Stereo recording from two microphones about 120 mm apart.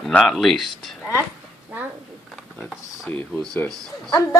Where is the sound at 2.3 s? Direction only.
Centre (ahead or behind).